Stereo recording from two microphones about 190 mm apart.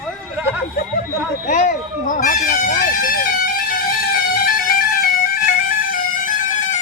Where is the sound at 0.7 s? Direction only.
45° left (ahead or behind).